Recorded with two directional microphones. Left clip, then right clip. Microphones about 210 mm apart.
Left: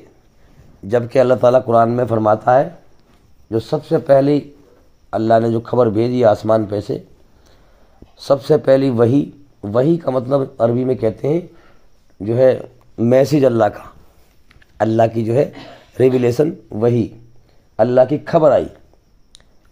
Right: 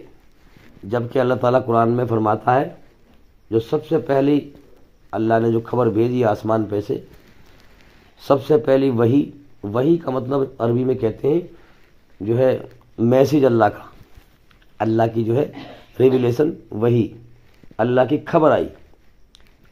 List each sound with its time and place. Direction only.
0.8 s a man's voice: 50° left (ahead or behind)
8.2 s a man's voice: 45° left (ahead or behind)